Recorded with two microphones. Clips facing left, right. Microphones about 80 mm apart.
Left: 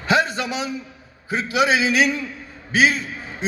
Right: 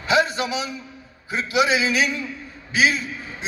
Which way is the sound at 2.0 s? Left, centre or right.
Left.